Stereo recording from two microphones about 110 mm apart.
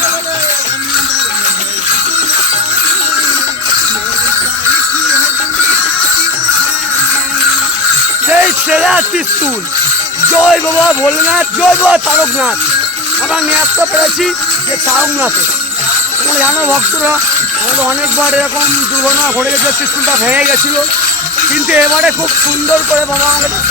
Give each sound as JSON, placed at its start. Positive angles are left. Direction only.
{"t": 8.3, "sound": "music", "side_deg": -10}
{"t": 10.4, "sound": "speech", "side_deg": 0}
{"t": 13.5, "sound": "music", "side_deg": -15}
{"t": 20.2, "sound": "music", "side_deg": -15}